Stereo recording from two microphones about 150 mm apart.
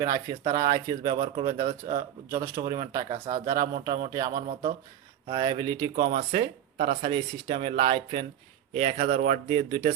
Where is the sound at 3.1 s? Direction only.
50° right (ahead or behind).